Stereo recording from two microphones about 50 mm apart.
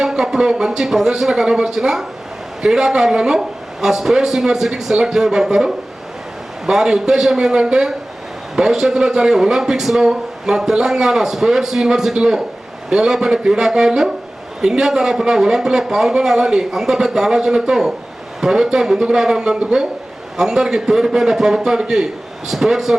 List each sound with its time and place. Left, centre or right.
0.0 s a man's voice: centre